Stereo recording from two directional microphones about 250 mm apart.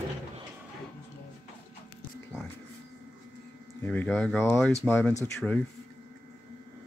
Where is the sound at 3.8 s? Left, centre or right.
Centre.